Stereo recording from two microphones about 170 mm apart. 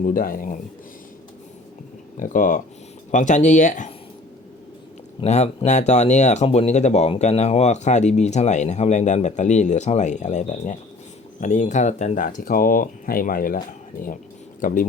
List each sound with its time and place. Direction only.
0.0 s speech: 55° left (ahead or behind)
2.1 s speech: 50° left (ahead or behind)
5.2 s speech: 40° left (ahead or behind)